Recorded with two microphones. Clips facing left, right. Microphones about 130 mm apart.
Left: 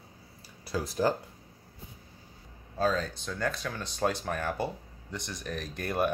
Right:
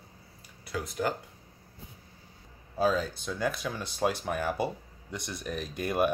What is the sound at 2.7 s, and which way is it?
Speech, 10° right (ahead or behind).